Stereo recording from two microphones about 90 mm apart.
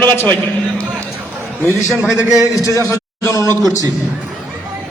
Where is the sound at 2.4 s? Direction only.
40° left (ahead or behind).